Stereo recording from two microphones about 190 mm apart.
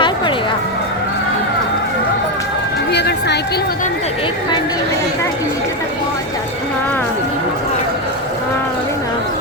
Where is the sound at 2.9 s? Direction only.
60° left (ahead or behind).